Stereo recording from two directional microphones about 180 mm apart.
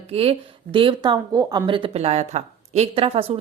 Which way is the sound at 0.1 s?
30° right (ahead or behind).